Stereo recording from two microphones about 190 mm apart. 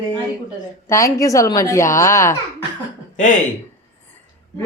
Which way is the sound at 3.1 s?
40° left (ahead or behind).